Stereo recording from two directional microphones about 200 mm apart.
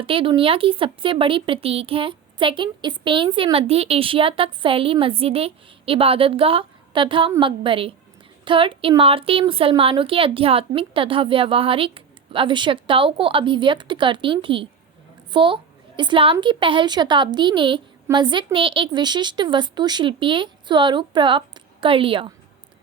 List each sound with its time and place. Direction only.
0.0 s speech: 25° right (ahead or behind)